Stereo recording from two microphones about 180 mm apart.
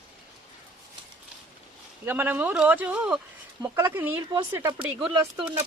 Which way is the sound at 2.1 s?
10° right (ahead or behind).